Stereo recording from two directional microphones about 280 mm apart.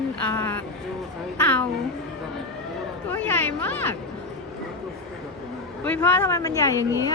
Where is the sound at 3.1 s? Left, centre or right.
Centre.